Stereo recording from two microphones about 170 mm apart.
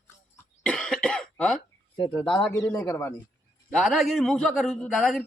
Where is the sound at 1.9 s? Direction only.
25° left (ahead or behind).